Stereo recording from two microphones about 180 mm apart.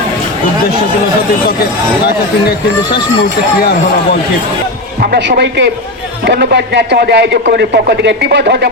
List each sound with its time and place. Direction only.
4.9 s speech: 60° right (ahead or behind)